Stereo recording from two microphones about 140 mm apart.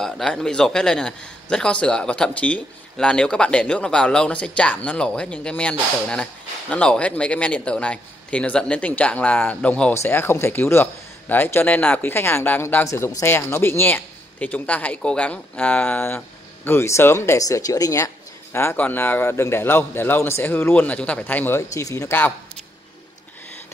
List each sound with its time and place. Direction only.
0.0 s a man's voice: 5° left (ahead or behind)